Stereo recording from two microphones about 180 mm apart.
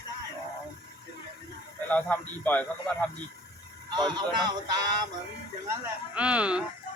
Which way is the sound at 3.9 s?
25° right (ahead or behind).